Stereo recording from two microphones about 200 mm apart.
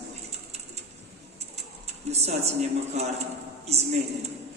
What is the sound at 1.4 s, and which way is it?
Speech, 35° right (ahead or behind).